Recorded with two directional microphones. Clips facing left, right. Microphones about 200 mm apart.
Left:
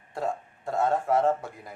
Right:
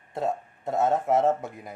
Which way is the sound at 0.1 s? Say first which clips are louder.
Right 2 dB; 20° right (ahead or behind).